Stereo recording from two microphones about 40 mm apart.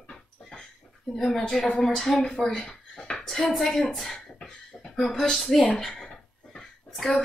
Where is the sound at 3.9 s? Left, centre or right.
Centre.